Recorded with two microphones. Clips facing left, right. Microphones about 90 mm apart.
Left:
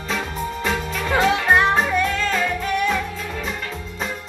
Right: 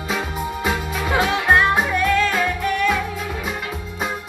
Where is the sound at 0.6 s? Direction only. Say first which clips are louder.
Right 1 dB; 15° right (ahead or behind).